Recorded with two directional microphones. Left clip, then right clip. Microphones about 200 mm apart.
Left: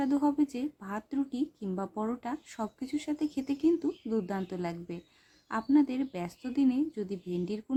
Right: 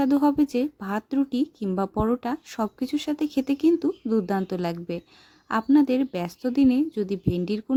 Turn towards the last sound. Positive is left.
turn(degrees=-35)  # may be behind; listen again after turning